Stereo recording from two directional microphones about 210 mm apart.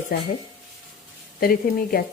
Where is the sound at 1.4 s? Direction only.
45° left (ahead or behind).